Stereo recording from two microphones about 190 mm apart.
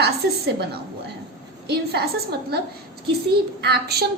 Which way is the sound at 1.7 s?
60° right (ahead or behind).